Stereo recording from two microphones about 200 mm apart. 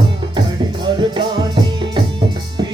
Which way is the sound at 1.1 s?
25° right (ahead or behind).